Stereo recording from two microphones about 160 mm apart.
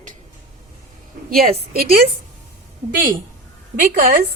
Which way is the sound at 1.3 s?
60° right (ahead or behind).